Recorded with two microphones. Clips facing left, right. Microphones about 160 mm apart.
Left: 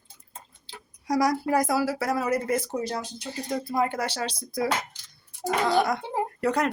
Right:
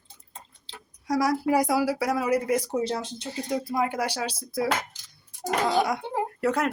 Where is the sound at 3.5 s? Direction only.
5° right (ahead or behind).